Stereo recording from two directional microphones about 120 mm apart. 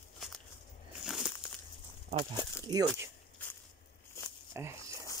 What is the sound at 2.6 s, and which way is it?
Speech, 30° right (ahead or behind).